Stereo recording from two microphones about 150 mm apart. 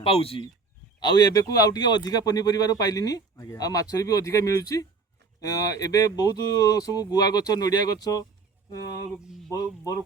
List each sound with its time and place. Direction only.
0.0 s speech: 40° left (ahead or behind)
0.9 s speech: 30° left (ahead or behind)